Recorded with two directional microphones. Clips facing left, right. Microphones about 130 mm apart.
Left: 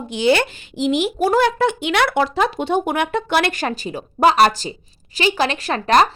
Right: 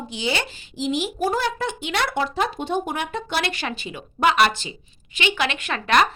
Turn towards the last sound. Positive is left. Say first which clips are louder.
# left 4 dB
turn(degrees=35)  # may be behind; listen again after turning